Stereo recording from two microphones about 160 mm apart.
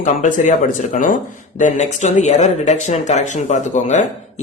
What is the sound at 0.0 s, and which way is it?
Speech, 50° left (ahead or behind).